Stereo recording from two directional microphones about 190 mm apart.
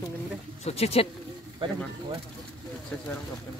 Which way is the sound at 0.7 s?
35° left (ahead or behind).